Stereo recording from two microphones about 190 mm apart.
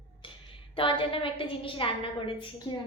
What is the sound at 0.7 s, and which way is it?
A child's voice, 25° left (ahead or behind).